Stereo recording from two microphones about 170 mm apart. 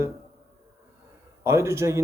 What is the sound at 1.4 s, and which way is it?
Speech, 15° right (ahead or behind).